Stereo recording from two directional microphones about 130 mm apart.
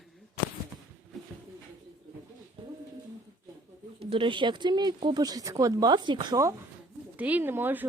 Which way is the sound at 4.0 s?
40° right (ahead or behind).